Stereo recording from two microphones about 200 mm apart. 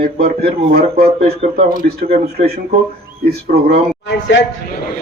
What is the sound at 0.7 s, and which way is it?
Speech, 50° right (ahead or behind).